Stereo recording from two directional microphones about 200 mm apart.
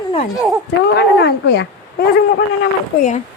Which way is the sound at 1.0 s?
55° left (ahead or behind).